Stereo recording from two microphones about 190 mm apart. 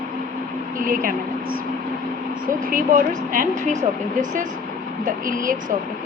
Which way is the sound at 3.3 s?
40° right (ahead or behind).